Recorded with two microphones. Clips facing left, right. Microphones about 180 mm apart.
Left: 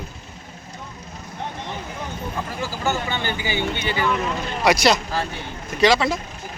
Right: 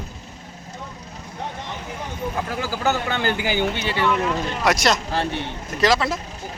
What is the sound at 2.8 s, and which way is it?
Speech, 70° right (ahead or behind).